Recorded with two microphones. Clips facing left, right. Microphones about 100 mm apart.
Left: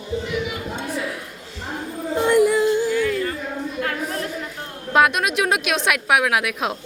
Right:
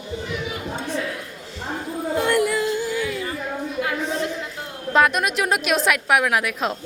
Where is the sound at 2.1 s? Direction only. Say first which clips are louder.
Left 4 dB; 20° left (ahead or behind).